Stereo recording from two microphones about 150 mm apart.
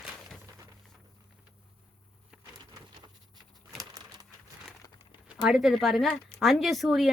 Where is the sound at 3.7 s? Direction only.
25° right (ahead or behind).